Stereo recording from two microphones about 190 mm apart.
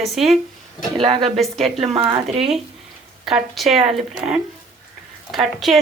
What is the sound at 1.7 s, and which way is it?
Speech, 30° right (ahead or behind).